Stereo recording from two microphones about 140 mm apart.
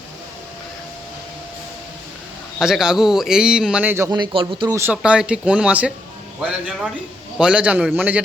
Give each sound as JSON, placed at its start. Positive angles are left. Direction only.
{"t": 2.6, "sound": "a man's voice", "side_deg": -5}
{"t": 4.1, "sound": "speech", "side_deg": -35}
{"t": 4.7, "sound": "speech", "side_deg": -15}